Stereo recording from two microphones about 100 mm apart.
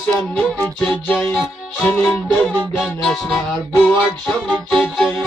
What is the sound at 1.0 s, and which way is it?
Music, 15° left (ahead or behind).